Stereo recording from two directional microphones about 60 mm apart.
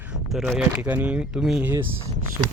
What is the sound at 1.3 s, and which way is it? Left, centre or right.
Speech, centre.